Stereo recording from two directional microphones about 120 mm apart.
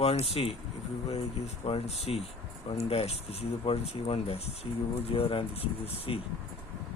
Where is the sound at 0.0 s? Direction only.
55° left (ahead or behind).